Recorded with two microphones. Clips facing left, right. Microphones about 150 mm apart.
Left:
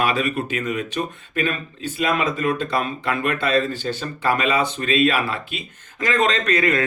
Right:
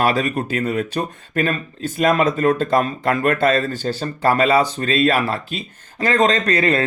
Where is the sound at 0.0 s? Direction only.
40° right (ahead or behind).